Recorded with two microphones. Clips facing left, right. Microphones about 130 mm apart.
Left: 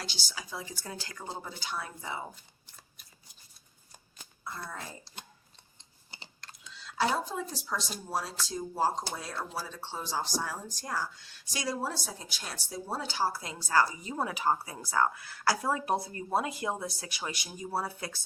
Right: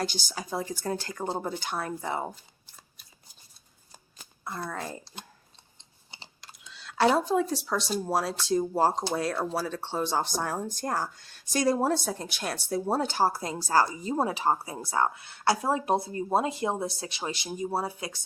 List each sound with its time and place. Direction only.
0.0 s speech: 50° right (ahead or behind)
4.4 s speech: 65° right (ahead or behind)
6.4 s typing: 10° right (ahead or behind)
6.7 s speech: 70° right (ahead or behind); by 18.2 s 20° right (ahead or behind)